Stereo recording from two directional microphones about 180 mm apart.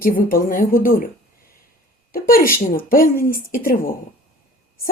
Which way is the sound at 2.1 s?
55° left (ahead or behind).